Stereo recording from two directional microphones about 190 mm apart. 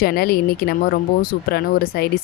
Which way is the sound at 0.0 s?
55° left (ahead or behind).